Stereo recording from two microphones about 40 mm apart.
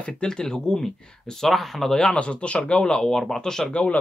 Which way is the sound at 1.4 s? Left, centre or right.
Centre.